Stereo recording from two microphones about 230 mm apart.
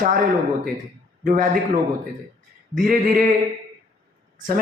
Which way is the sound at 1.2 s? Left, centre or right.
Right.